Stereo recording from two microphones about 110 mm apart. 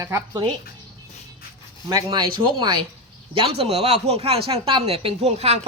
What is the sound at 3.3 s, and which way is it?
Speech, 60° right (ahead or behind).